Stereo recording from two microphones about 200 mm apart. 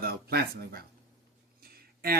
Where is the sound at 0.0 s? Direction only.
50° right (ahead or behind).